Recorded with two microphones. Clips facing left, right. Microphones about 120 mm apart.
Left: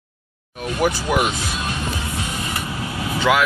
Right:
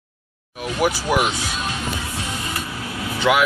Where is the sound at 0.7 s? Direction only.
5° right (ahead or behind).